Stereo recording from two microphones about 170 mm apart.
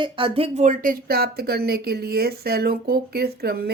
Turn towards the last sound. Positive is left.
turn(degrees=-65)  # may be behind; listen again after turning